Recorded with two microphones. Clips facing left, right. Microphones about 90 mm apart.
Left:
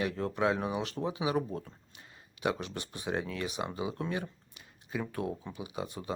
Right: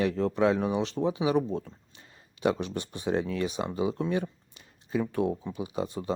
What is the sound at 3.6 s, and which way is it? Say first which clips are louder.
Speech: right 4 dB; 20° left (ahead or behind).